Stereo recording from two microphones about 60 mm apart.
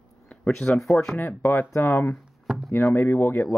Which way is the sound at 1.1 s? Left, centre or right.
Left.